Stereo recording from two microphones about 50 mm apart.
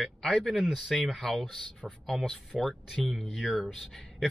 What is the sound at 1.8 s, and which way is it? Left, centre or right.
Speech, right.